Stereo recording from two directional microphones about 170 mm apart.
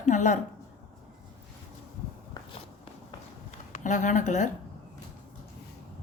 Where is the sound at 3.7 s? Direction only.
45° left (ahead or behind).